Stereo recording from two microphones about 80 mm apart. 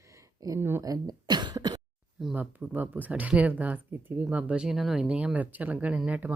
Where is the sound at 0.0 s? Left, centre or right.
Right.